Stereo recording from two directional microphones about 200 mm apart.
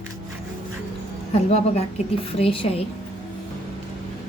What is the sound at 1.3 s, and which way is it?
A woman's voice, 30° left (ahead or behind).